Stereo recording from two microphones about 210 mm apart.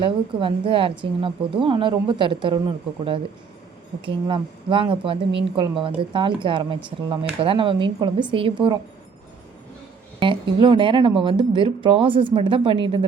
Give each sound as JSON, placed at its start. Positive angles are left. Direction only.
{"t": 0.0, "sound": "speech", "side_deg": -25}
{"t": 4.3, "sound": "speech", "side_deg": -25}
{"t": 10.2, "sound": "speech", "side_deg": -25}